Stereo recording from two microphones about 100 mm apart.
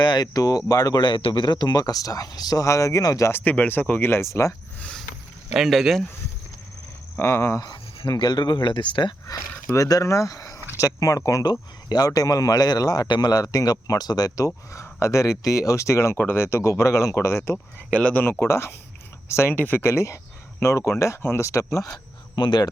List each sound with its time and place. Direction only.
0.0 s speech: 45° left (ahead or behind)
3.4 s speech: 15° left (ahead or behind)
4.8 s a sound: 10° left (ahead or behind)
5.5 s speech: 5° right (ahead or behind)
7.2 s speech: 30° left (ahead or behind)
7.7 s speech: 45° left (ahead or behind)
9.2 s speech: 35° left (ahead or behind)
17.9 s speech: 10° left (ahead or behind)
18.3 s speech: 25° left (ahead or behind)
22.4 s speech: 50° left (ahead or behind)